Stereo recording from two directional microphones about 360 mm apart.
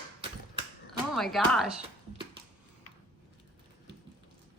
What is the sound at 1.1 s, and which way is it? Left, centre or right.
Speech, centre.